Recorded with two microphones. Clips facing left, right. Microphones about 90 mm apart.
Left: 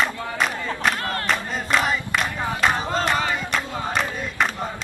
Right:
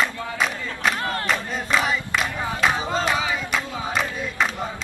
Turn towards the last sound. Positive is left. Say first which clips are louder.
# even
turn(degrees=0)  # may be behind; listen again after turning